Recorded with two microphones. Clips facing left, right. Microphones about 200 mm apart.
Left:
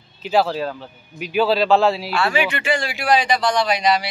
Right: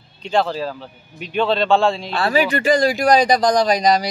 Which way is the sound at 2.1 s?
35° right (ahead or behind).